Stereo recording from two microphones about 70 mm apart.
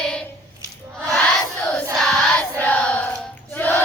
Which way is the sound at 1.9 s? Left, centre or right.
Centre.